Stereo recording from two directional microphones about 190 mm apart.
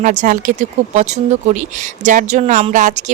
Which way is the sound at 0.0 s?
40° right (ahead or behind).